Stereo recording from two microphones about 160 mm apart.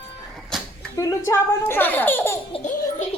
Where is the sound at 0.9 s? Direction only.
20° left (ahead or behind).